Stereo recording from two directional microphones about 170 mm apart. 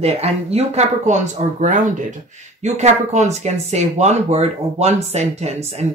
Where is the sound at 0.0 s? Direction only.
35° right (ahead or behind).